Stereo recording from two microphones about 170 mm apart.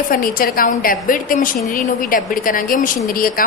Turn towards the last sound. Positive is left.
turn(degrees=55)  # may be behind; listen again after turning